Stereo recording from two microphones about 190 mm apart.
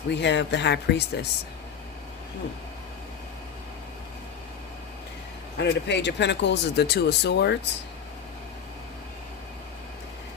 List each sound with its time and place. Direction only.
0.1 s speech: 65° left (ahead or behind)
5.5 s speech: 65° left (ahead or behind)